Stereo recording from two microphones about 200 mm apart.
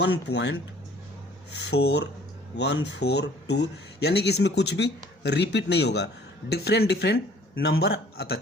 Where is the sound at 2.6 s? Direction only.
65° left (ahead or behind).